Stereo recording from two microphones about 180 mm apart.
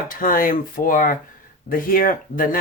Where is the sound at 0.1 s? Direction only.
50° left (ahead or behind).